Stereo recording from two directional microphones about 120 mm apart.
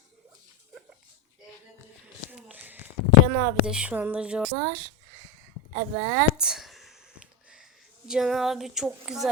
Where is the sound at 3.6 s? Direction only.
10° right (ahead or behind).